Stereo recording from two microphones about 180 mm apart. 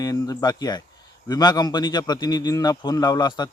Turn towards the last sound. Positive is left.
turn(degrees=25)  # may be behind; listen again after turning